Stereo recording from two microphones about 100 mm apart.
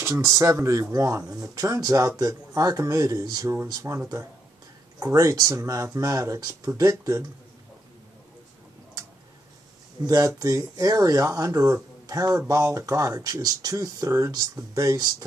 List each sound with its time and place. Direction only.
0.0 s speech: 30° right (ahead or behind)
5.0 s speech: 35° right (ahead or behind)
10.0 s speech: 35° right (ahead or behind)